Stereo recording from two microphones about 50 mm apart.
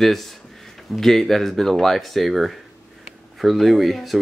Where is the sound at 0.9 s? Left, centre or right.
Centre.